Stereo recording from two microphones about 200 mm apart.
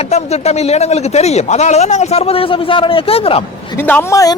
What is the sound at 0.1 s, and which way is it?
A woman's voice, 35° left (ahead or behind).